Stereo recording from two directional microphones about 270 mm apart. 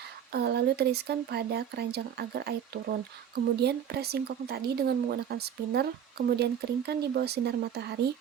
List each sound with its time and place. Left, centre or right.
0.3 s speech: right